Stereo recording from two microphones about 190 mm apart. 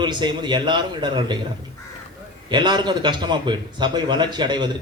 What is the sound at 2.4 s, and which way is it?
A man's voice, 25° right (ahead or behind).